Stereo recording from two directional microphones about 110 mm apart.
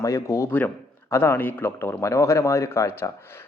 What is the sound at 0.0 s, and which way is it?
A man's voice, 30° left (ahead or behind).